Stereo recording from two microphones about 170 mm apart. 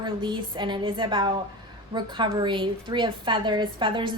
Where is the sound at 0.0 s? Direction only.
30° right (ahead or behind).